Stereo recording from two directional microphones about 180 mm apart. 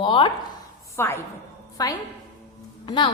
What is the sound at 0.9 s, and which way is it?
A woman's voice, 15° left (ahead or behind).